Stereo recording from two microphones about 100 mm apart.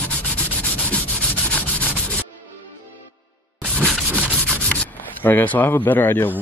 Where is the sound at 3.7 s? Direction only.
5° left (ahead or behind).